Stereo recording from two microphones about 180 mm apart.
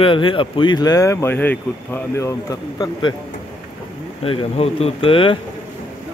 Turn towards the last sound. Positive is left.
turn(degrees=30)  # may be behind; listen again after turning